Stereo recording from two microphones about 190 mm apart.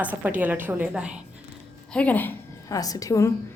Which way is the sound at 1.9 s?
10° left (ahead or behind).